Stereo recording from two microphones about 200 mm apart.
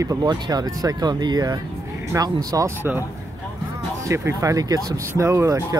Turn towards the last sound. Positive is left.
turn(degrees=-15)  # may be behind; listen again after turning